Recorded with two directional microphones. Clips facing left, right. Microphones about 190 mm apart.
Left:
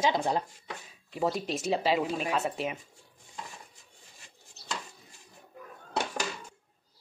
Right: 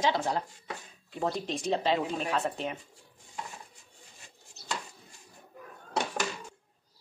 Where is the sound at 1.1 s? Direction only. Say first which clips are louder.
Left 2 dB; 5° left (ahead or behind).